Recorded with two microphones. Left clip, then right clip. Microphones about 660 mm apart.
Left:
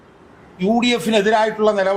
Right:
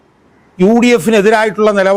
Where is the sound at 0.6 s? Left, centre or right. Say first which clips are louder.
Right 8 dB; right.